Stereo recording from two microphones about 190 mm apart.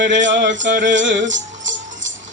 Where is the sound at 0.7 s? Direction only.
40° right (ahead or behind).